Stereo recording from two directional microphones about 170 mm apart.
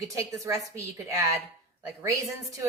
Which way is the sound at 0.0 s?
20° right (ahead or behind).